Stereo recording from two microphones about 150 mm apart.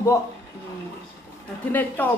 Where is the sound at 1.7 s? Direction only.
10° left (ahead or behind).